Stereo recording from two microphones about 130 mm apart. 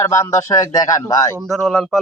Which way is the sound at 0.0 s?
20° left (ahead or behind).